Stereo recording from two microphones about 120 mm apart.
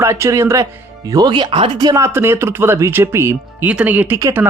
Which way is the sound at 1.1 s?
35° right (ahead or behind).